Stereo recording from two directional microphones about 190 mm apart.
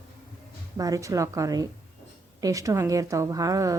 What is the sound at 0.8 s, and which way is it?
Speech, 20° right (ahead or behind).